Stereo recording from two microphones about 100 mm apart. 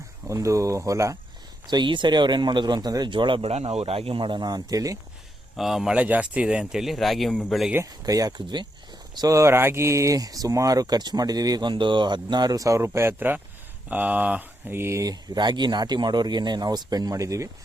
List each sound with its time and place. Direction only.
0.3 s speech: 30° right (ahead or behind)
1.7 s speech: 50° right (ahead or behind)
3.4 s speech: 85° right; by 4.9 s 35° right (ahead or behind)
5.5 s speech: 5° right (ahead or behind)
7.9 s speech: 40° right (ahead or behind)
9.1 s speech: 35° right (ahead or behind)
11.7 s speech: 55° right (ahead or behind); by 15.0 s 25° right (ahead or behind)
15.0 s speech: 45° right (ahead or behind)